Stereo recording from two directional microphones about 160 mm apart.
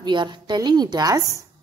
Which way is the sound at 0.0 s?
30° right (ahead or behind).